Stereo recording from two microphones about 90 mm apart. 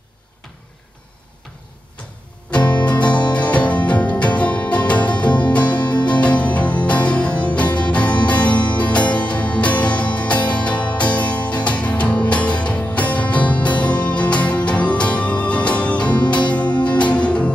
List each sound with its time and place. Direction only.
2.8 s music: 15° left (ahead or behind)